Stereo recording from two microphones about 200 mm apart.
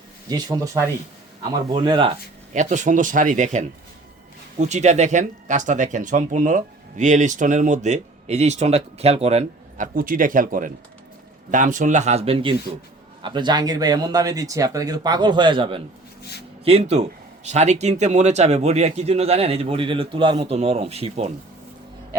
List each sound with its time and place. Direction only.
0.3 s speech: 20° right (ahead or behind)